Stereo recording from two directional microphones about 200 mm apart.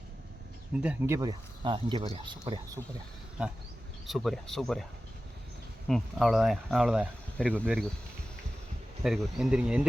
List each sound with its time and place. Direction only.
0.8 s speech: 10° right (ahead or behind)
4.0 s speech: centre (ahead or behind)
5.9 s speech: centre (ahead or behind)
9.0 s speech: centre (ahead or behind)